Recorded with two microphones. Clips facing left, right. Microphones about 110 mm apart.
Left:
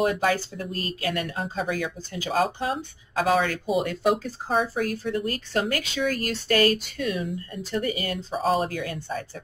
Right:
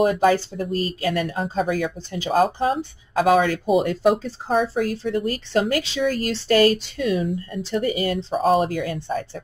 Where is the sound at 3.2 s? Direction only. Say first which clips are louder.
Right 5 dB; 50° right (ahead or behind).